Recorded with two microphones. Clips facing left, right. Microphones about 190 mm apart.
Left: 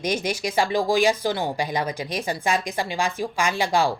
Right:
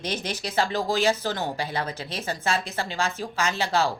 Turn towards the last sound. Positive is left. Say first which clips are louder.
# left 3 dB
turn(degrees=15)  # may be behind; listen again after turning